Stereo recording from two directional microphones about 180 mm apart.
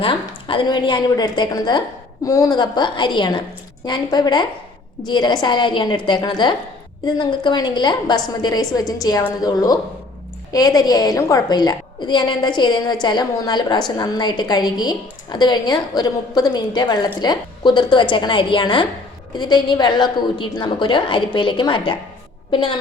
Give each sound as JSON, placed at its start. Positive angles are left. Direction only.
{"t": 0.0, "sound": "a woman's voice", "side_deg": 30}